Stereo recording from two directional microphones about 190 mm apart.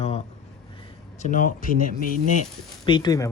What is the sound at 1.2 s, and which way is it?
Speech, 45° left (ahead or behind).